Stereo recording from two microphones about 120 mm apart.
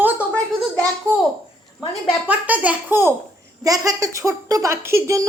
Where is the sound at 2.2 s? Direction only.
10° right (ahead or behind).